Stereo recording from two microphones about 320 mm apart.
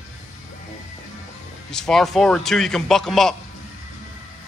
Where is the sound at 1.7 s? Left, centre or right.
Centre.